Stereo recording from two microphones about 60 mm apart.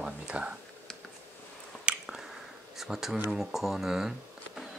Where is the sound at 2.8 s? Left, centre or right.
Centre.